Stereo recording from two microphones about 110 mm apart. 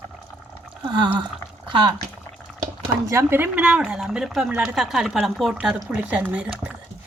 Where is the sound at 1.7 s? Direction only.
45° right (ahead or behind).